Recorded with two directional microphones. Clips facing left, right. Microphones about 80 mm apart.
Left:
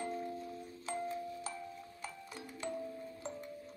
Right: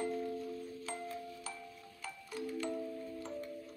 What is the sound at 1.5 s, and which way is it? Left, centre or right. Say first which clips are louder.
Music: left 3 dB; left.